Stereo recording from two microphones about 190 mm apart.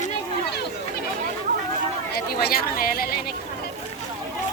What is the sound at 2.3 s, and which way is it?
Speech, 50° left (ahead or behind).